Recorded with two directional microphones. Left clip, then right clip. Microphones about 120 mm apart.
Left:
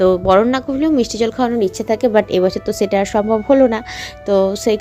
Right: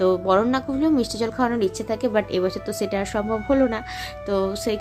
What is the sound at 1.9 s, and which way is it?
Speech, 45° left (ahead or behind).